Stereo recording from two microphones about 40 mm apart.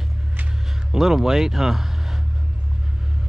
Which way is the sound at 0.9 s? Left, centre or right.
Centre.